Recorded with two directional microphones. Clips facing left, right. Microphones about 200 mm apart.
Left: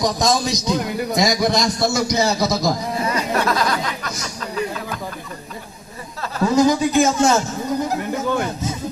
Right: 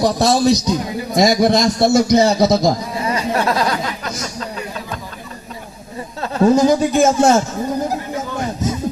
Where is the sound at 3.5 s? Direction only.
30° right (ahead or behind).